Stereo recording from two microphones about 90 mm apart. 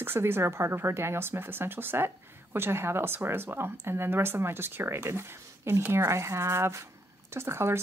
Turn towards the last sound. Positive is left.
turn(degrees=-30)  # may be behind; listen again after turning